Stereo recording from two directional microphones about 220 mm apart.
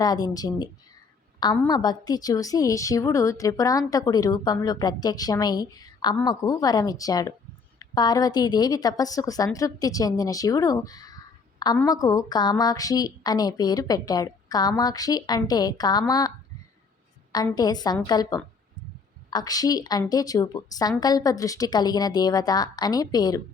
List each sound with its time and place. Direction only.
0.0 s a woman's voice: 15° left (ahead or behind)
17.3 s a woman's voice: 20° left (ahead or behind)